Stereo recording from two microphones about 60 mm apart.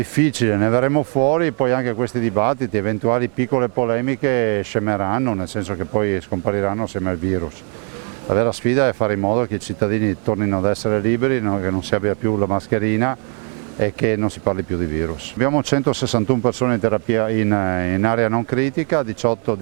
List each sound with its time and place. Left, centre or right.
0.4 s speech: right
15.9 s speech: centre
16.1 s speech: right